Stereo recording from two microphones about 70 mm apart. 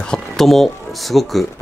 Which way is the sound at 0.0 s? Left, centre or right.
Centre.